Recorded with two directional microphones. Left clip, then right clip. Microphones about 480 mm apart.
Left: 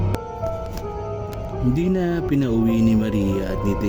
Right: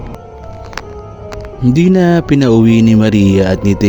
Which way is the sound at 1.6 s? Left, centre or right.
Centre.